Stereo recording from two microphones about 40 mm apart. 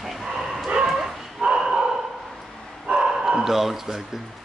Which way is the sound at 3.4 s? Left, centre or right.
Centre.